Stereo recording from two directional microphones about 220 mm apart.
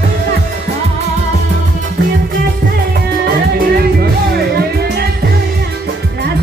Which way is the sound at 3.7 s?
45° right (ahead or behind).